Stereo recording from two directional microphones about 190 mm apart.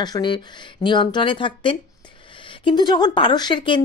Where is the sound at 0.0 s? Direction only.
25° left (ahead or behind).